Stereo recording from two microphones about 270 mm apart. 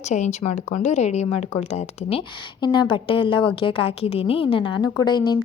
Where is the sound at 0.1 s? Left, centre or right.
Left.